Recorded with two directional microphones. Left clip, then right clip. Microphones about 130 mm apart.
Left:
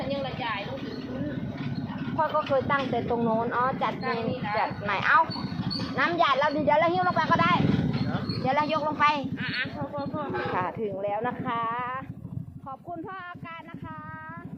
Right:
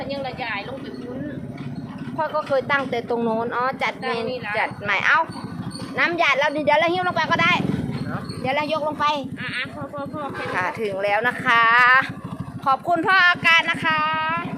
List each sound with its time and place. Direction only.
0.1 s vehicle: 35° right (ahead or behind)
2.1 s speech: 25° right (ahead or behind)
4.0 s speech: 90° right
4.5 s speech: 20° right (ahead or behind)
11.0 s speech: 10° right (ahead or behind)
12.6 s a sound: 5° left (ahead or behind)